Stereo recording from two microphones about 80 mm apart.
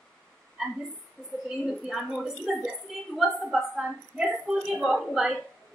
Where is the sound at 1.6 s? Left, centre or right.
Centre.